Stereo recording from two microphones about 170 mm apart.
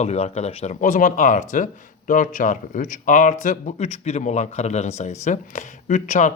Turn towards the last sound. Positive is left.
turn(degrees=45)  # may be behind; listen again after turning